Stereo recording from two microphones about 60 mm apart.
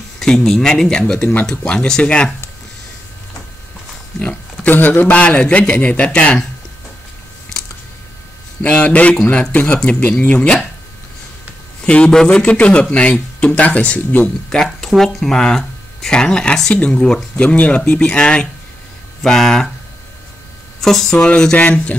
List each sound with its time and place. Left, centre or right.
0.4 s speech: centre
4.2 s pig: left
5.2 s speech: left
8.6 s speech: left
11.8 s a man's voice: centre
14.5 s speech: centre
20.8 s speech: centre
21.2 s speech: centre